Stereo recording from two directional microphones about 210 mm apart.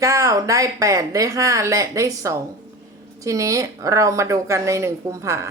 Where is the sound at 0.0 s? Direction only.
15° right (ahead or behind).